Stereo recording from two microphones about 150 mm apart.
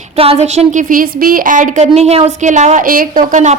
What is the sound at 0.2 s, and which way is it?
A woman's voice, 45° right (ahead or behind).